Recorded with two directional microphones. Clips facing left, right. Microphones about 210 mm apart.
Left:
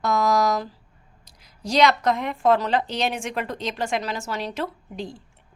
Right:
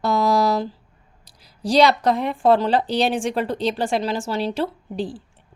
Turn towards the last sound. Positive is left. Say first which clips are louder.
# right 6 dB
turn(degrees=-30)  # may be behind; listen again after turning